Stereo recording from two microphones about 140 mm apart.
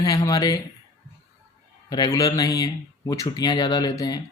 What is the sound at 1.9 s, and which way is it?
Speech, 25° left (ahead or behind).